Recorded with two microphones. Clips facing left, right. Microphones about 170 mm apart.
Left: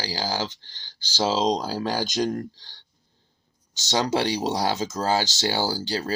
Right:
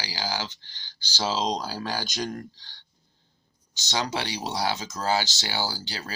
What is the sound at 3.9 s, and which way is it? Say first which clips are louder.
Speech: left 6 dB; 40° left (ahead or behind).